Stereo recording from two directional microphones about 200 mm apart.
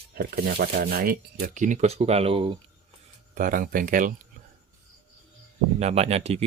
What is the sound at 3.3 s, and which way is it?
Speech, 45° right (ahead or behind).